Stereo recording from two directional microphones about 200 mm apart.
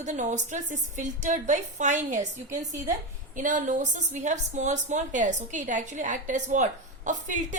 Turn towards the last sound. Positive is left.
turn(degrees=-40)  # may be behind; listen again after turning